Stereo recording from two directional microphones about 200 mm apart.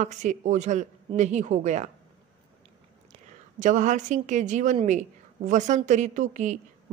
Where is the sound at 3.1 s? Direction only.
35° right (ahead or behind).